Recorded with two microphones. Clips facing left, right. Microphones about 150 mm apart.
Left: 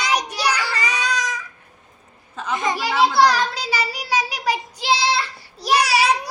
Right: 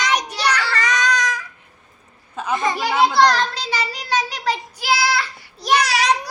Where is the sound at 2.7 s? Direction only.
20° left (ahead or behind).